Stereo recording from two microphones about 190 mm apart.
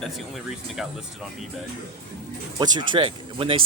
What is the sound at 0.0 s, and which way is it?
Speech, centre (ahead or behind).